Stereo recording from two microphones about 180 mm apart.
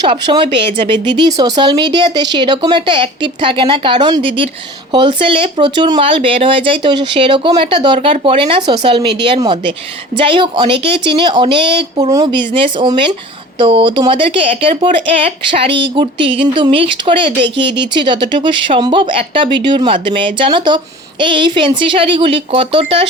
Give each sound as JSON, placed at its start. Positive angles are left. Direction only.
{"t": 0.1, "sound": "speech", "side_deg": -25}